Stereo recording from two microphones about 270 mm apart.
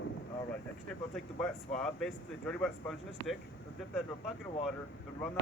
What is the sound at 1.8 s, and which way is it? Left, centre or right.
Speech, centre.